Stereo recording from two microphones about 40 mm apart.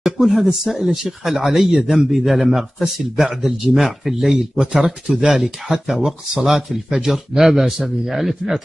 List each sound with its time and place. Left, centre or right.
0.0 s a man's voice: centre
5.4 s speech: centre